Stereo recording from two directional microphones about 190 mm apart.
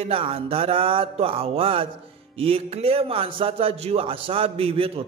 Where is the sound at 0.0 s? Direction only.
30° right (ahead or behind).